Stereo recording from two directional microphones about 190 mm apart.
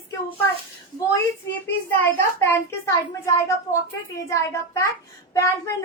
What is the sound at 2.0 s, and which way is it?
A child's voice, 10° left (ahead or behind).